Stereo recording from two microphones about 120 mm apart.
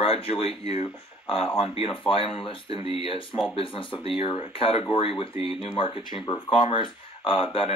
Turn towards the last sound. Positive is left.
turn(degrees=50)  # may be behind; listen again after turning